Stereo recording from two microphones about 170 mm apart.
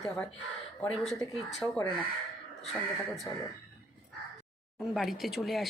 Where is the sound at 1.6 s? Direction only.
10° right (ahead or behind).